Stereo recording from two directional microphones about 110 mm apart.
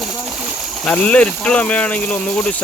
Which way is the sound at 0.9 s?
10° left (ahead or behind).